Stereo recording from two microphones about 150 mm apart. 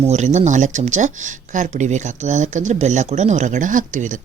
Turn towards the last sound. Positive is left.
turn(degrees=-60)  # may be behind; listen again after turning